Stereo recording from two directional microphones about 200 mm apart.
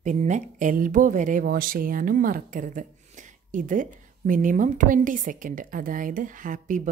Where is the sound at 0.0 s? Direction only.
35° right (ahead or behind).